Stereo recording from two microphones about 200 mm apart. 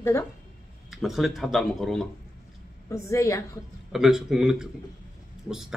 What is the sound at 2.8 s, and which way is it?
Speech, 15° left (ahead or behind).